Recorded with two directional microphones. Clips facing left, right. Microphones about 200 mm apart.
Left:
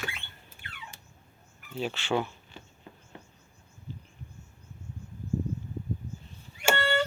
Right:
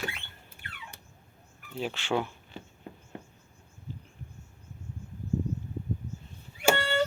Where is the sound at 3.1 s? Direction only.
50° right (ahead or behind).